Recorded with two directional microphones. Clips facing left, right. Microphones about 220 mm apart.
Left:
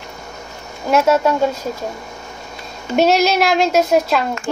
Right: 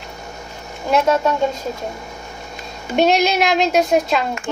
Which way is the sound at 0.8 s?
5° left (ahead or behind).